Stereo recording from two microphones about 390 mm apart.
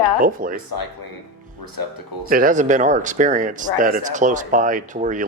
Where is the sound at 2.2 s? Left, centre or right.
Right.